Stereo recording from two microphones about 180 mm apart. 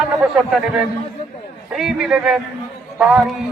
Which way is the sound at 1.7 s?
Centre (ahead or behind).